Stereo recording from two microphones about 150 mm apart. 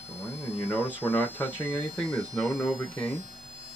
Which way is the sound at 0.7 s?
10° left (ahead or behind).